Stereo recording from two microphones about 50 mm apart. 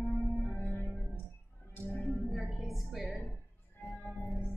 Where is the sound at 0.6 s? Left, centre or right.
Left.